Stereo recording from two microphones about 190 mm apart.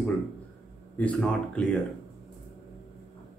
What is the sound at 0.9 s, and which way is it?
Speech, 5° left (ahead or behind).